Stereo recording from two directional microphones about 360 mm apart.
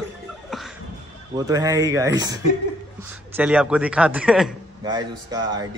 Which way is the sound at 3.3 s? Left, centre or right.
Centre.